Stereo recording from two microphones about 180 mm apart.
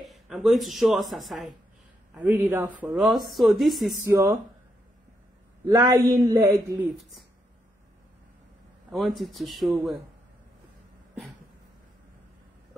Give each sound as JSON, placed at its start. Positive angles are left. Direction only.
{"t": 0.0, "sound": "speech", "side_deg": 0}
{"t": 2.1, "sound": "speech", "side_deg": -10}
{"t": 4.1, "sound": "speech", "side_deg": -15}
{"t": 5.7, "sound": "a man's voice", "side_deg": -20}
{"t": 7.0, "sound": "speech", "side_deg": 0}
{"t": 8.9, "sound": "speech", "side_deg": 0}